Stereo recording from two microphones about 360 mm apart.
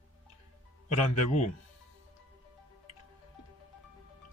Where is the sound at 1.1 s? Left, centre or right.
Centre.